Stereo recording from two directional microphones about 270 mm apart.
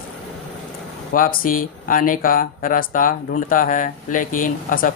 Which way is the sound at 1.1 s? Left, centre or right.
Left.